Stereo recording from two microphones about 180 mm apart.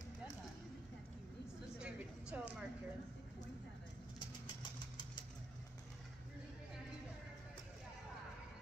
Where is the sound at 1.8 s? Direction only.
5° right (ahead or behind).